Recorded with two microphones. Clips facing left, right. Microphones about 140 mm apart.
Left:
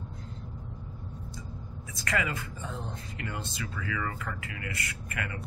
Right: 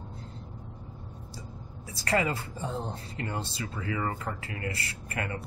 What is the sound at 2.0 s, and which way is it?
Speech, 30° right (ahead or behind).